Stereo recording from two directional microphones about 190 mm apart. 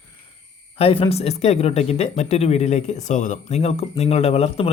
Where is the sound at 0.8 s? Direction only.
30° left (ahead or behind).